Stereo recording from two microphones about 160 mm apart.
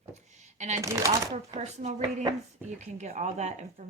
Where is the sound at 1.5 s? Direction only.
45° right (ahead or behind).